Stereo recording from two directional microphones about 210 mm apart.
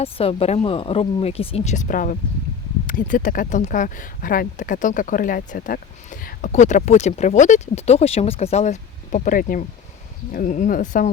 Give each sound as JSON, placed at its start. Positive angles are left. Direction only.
{"t": 0.0, "sound": "speech", "side_deg": 25}